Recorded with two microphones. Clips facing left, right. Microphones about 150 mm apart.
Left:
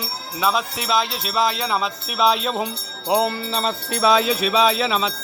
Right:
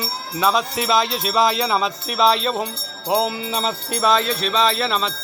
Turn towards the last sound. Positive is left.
turn(degrees=5)  # may be behind; listen again after turning